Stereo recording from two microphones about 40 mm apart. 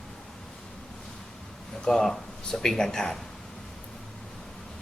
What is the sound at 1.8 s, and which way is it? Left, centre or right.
Speech, centre.